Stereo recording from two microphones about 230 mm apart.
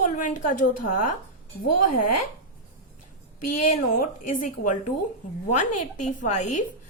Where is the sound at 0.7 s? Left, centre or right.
Left.